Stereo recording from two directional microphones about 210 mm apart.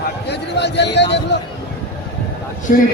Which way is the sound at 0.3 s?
55° left (ahead or behind).